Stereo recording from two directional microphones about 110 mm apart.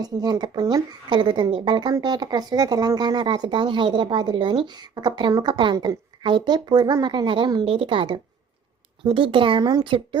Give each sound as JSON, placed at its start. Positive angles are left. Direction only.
{"t": 0.0, "sound": "a woman's voice", "side_deg": -35}
{"t": 5.7, "sound": "speech", "side_deg": -30}
{"t": 6.2, "sound": "a woman's voice", "side_deg": -45}